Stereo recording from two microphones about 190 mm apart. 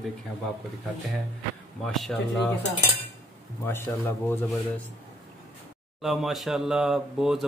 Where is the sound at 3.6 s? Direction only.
10° left (ahead or behind).